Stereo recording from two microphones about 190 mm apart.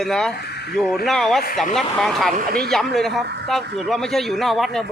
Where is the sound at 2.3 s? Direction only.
50° right (ahead or behind).